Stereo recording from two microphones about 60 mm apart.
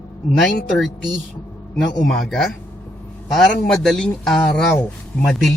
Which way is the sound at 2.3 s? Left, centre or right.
Centre.